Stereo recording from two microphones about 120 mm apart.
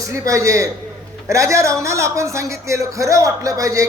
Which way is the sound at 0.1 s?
25° right (ahead or behind).